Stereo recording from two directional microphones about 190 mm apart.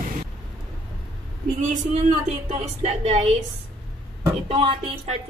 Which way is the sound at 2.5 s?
35° right (ahead or behind).